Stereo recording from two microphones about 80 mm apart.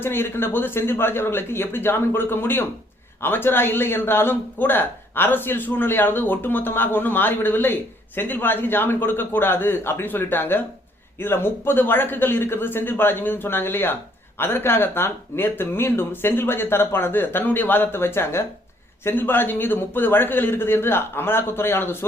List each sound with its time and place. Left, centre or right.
0.0 s speech: left